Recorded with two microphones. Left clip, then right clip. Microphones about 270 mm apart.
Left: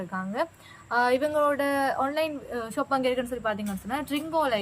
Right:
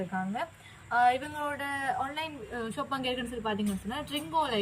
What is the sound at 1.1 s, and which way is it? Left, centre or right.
Speech, centre.